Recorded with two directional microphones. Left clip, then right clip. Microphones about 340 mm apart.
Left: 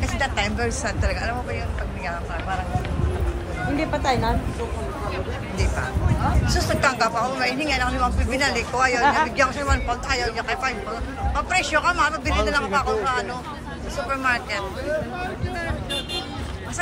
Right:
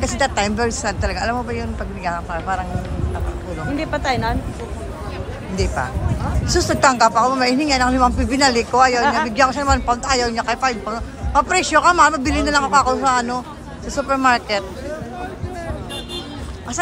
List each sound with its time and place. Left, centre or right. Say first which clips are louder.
0.0 s a man's voice: right 5 dB; centre
3.7 s speech: right 2 dB; right
6.4 s a man's voice: right 8 dB; centre
9.0 s speech: right 1 dB; right
9.4 s a man's voice: right 5 dB; centre